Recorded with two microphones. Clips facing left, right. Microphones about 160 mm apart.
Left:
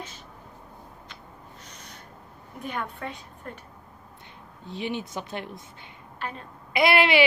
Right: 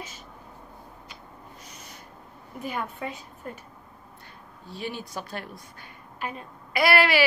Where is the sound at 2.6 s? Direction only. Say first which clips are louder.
Right 1 dB; 5° right (ahead or behind).